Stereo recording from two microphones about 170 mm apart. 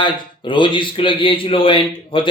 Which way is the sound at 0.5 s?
30° left (ahead or behind).